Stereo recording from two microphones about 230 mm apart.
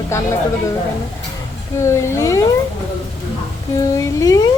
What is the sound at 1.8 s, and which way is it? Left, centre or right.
Speech, centre.